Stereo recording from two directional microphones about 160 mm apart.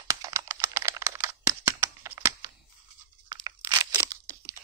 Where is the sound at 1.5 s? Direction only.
15° right (ahead or behind).